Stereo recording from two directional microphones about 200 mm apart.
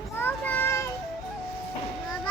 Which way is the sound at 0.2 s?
10° left (ahead or behind).